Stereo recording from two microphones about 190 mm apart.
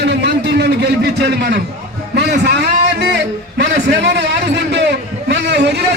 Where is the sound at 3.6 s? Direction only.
65° right (ahead or behind).